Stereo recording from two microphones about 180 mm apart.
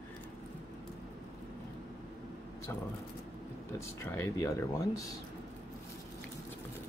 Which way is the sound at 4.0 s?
15° left (ahead or behind).